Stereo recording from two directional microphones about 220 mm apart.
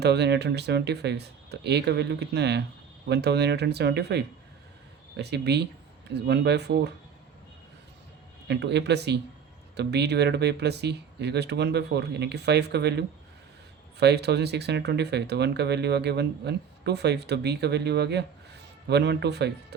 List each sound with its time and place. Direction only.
0.0 s speech: 50° right (ahead or behind)
8.4 s speech: 50° right (ahead or behind)